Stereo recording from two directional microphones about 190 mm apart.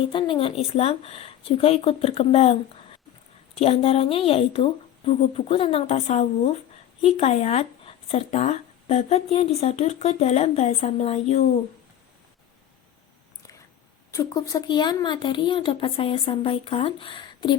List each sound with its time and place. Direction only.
0.1 s speech: 25° left (ahead or behind)
14.1 s speech: 15° left (ahead or behind)